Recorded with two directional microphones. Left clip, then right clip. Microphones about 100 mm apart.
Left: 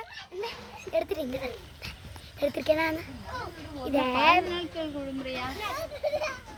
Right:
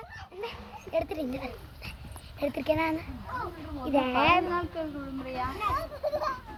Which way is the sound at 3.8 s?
45° left (ahead or behind).